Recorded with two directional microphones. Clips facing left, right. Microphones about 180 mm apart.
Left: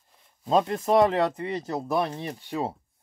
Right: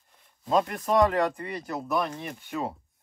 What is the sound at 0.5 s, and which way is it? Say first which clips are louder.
Speech: left 3 dB; 25° left (ahead or behind).